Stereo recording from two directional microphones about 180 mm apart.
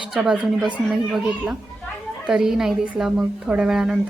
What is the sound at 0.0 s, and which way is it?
A woman's voice, 5° right (ahead or behind).